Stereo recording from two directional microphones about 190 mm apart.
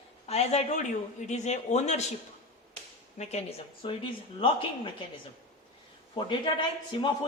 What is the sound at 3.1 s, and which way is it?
Speech, 35° left (ahead or behind).